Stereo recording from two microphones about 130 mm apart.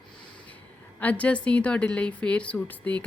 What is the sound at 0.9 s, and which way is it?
A woman's voice, 10° left (ahead or behind).